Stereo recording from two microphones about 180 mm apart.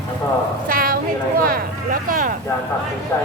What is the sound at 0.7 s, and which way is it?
Speech, 50° right (ahead or behind).